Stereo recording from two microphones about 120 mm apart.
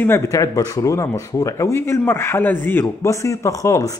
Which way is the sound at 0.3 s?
30° left (ahead or behind).